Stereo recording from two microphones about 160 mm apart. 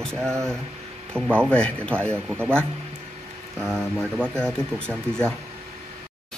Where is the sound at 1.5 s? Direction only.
5° left (ahead or behind).